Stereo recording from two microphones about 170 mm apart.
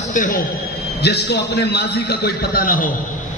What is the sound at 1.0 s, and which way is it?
A man's voice, 75° left (ahead or behind).